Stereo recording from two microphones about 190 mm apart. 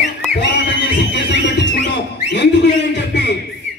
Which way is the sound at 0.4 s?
65° left (ahead or behind).